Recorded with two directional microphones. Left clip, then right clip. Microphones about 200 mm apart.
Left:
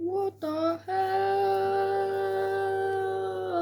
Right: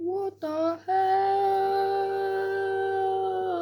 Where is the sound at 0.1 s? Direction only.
5° left (ahead or behind).